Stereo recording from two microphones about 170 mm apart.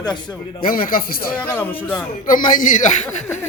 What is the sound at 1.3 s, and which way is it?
Speech, 10° left (ahead or behind).